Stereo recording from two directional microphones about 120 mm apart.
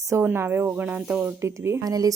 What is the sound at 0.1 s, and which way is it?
Speech, 20° right (ahead or behind).